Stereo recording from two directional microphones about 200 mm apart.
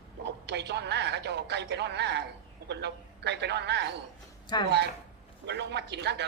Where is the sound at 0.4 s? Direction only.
60° right (ahead or behind).